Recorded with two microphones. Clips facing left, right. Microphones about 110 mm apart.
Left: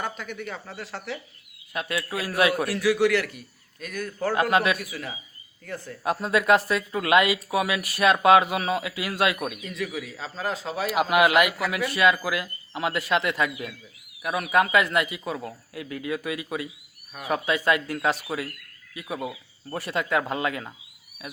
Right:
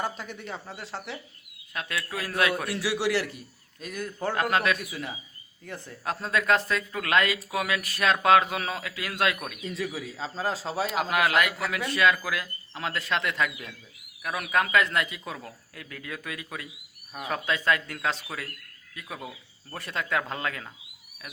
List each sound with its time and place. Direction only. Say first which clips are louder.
0.0 s a man's voice: left 1 dB; 30° right (ahead or behind)
1.7 s speech: left 4 dB; 5° left (ahead or behind)
2.6 s a man's voice: left 6 dB; 25° right (ahead or behind)
4.3 s speech: left 3 dB; 5° left (ahead or behind)
4.9 s a man's voice: even; 20° right (ahead or behind)
6.1 s speech: left 4 dB; 10° left (ahead or behind)
9.6 s a man's voice: left 1 dB; 30° right (ahead or behind)
10.9 s speech: left 6 dB; 10° left (ahead or behind)